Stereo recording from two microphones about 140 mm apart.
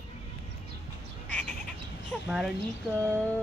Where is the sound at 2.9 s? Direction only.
15° right (ahead or behind).